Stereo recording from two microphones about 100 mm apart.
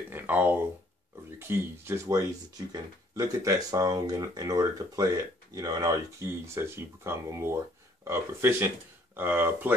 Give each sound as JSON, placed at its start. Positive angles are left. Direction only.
{"t": 0.1, "sound": "speech", "side_deg": -15}